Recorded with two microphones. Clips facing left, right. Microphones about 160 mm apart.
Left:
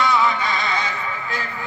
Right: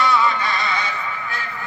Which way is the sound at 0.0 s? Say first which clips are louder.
Even; 20° left (ahead or behind).